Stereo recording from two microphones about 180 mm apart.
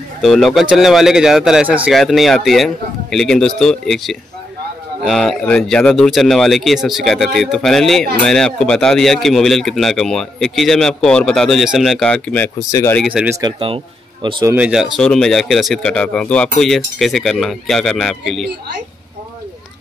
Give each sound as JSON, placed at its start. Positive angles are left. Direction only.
{"t": 0.2, "sound": "a man's voice", "side_deg": 0}
{"t": 12.5, "sound": "speech", "side_deg": 20}
{"t": 12.9, "sound": "a man's voice", "side_deg": -5}
{"t": 13.4, "sound": "speech", "side_deg": -30}
{"t": 14.2, "sound": "speech", "side_deg": -15}
{"t": 14.6, "sound": "a man's voice", "side_deg": 0}